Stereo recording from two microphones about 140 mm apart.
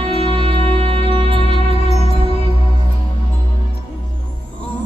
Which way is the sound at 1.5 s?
50° left (ahead or behind).